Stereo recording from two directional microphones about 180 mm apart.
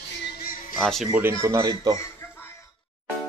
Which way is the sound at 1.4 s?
20° right (ahead or behind).